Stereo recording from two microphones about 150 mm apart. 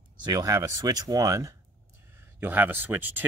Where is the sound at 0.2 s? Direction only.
25° right (ahead or behind).